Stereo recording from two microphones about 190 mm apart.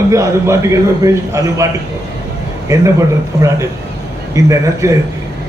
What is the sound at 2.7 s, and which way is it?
A man's voice, 15° right (ahead or behind).